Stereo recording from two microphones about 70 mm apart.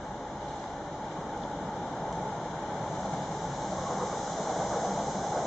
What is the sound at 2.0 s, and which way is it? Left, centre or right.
Vehicle, centre.